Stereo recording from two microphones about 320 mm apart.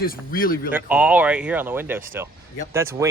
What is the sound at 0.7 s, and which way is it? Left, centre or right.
Speech, centre.